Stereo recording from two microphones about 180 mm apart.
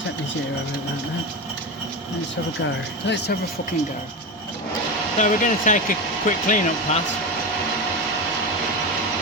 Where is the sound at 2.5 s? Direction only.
80° left.